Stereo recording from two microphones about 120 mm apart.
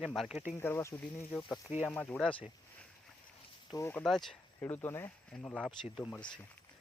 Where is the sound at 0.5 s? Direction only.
20° left (ahead or behind).